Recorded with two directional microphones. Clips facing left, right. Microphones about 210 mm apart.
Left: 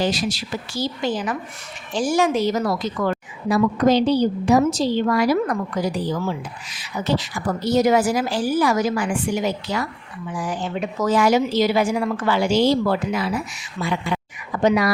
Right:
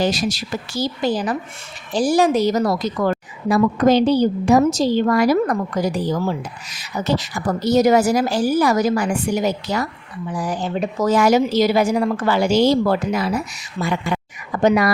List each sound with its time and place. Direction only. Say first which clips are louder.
0.0 s a woman's voice: right 2 dB; 45° right (ahead or behind)